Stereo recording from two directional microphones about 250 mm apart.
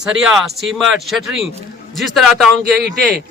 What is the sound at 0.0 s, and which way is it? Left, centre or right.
A man's voice, centre.